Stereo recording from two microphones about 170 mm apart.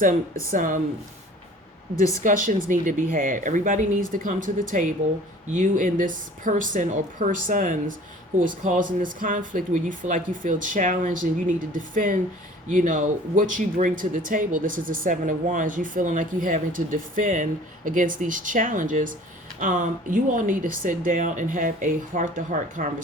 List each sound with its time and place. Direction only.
0.5 s speech: 50° right (ahead or behind)
2.2 s speech: 50° right (ahead or behind)